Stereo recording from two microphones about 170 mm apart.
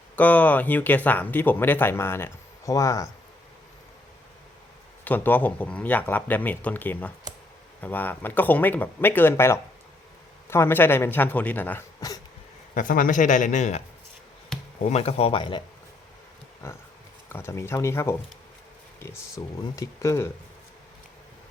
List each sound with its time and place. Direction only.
0.2 s speech: 10° left (ahead or behind)
5.0 s speech: 10° left (ahead or behind)
12.7 s speech: 55° left (ahead or behind); by 15.6 s 30° left (ahead or behind)
16.6 s speech: 15° left (ahead or behind)